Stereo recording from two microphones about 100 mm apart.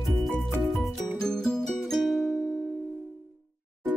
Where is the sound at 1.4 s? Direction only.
5° left (ahead or behind).